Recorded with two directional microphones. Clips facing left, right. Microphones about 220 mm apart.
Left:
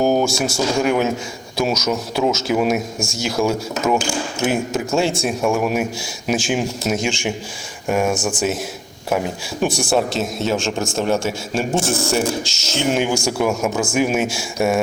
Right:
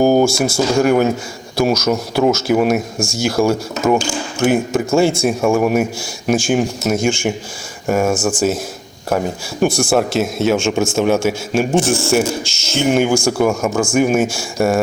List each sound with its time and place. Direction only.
0.0 s a sound: 5° right (ahead or behind)
0.5 s speech: centre (ahead or behind)
8.1 s speech: 15° left (ahead or behind)
9.0 s speech: centre (ahead or behind)